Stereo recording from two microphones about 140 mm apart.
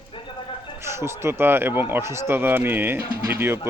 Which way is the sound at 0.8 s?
20° right (ahead or behind).